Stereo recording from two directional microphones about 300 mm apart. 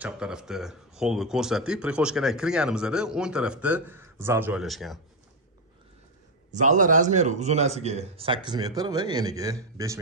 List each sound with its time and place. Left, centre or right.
0.0 s speech: centre
6.5 s a man's voice: right